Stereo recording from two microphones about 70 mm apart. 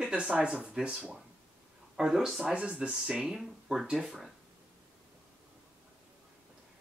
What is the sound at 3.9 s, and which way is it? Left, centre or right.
Speech, centre.